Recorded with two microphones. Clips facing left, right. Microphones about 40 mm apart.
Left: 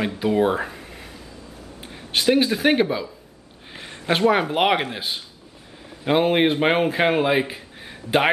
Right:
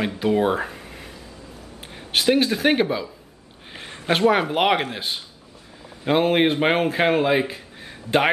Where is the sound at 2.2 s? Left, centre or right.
Centre.